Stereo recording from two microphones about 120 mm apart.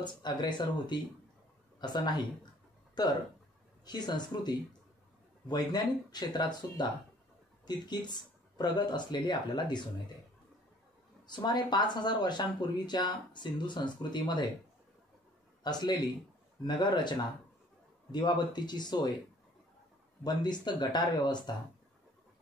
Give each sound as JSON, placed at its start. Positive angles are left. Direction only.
{"t": 0.0, "sound": "speech", "side_deg": 40}
{"t": 2.9, "sound": "a sound", "side_deg": 35}
{"t": 3.8, "sound": "speech", "side_deg": 35}
{"t": 11.2, "sound": "speech", "side_deg": 40}
{"t": 15.6, "sound": "speech", "side_deg": 35}
{"t": 20.2, "sound": "speech", "side_deg": 35}